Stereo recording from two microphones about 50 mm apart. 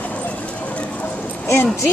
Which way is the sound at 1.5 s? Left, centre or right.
Left.